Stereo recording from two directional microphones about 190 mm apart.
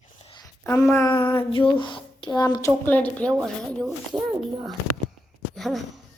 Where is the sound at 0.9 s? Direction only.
15° left (ahead or behind).